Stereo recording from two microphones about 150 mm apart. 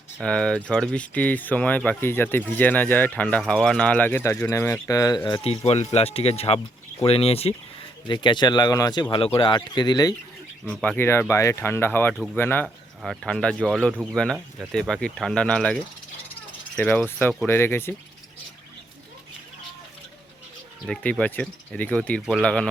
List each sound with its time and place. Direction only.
0.2 s speech: 5° left (ahead or behind); by 5.4 s 30° left (ahead or behind)
5.4 s speech: 45° left (ahead or behind); by 10.2 s 25° left (ahead or behind)
10.7 s speech: 10° left (ahead or behind)
12.1 s speech: centre (ahead or behind)
12.4 s speech: 15° left (ahead or behind)
12.6 s speech: centre (ahead or behind)
13.9 s speech: 5° right (ahead or behind); by 17.9 s 15° left (ahead or behind)
20.8 s speech: 5° left (ahead or behind)